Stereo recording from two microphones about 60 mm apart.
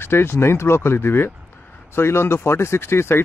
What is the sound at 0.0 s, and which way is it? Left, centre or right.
Speech, left.